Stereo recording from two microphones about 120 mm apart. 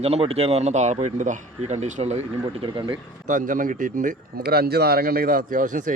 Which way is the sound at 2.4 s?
45° right (ahead or behind).